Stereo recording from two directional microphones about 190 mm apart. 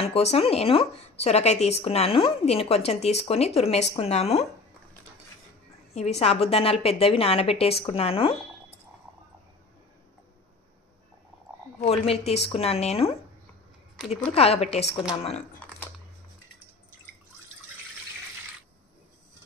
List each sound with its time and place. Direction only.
0.0 s a woman's voice: 30° left (ahead or behind)
5.9 s a woman's voice: 35° left (ahead or behind)
11.8 s a woman's voice: 35° left (ahead or behind)
13.9 s speech: centre (ahead or behind)
14.3 s a woman's voice: 30° left (ahead or behind)